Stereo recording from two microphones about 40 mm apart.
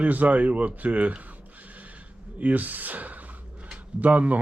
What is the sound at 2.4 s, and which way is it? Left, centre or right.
Speech, right.